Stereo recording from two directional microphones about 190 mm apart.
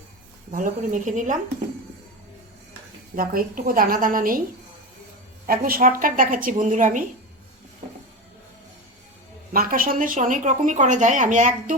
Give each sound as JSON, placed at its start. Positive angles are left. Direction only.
{"t": 0.5, "sound": "speech", "side_deg": -45}
{"t": 3.2, "sound": "speech", "side_deg": -50}
{"t": 5.5, "sound": "speech", "side_deg": -50}
{"t": 9.5, "sound": "speech", "side_deg": -50}